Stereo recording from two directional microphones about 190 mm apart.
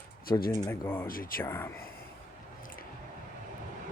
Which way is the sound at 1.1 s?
50° left (ahead or behind).